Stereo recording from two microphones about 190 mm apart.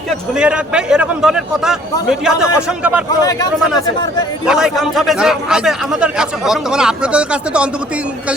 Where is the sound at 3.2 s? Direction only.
20° left (ahead or behind).